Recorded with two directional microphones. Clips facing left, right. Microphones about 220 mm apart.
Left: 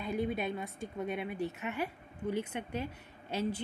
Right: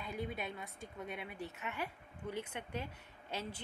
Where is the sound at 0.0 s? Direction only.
25° left (ahead or behind).